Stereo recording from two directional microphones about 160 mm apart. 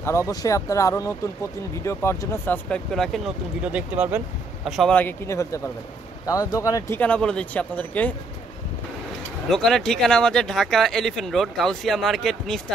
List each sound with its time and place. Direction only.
0.0 s speech: 15° left (ahead or behind); by 4.9 s centre (ahead or behind)
4.9 s speech: 15° left (ahead or behind)
7.0 s speech: 5° left (ahead or behind)
9.5 s speech: centre (ahead or behind)